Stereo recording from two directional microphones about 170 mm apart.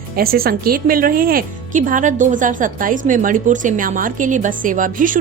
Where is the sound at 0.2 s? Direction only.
60° right (ahead or behind).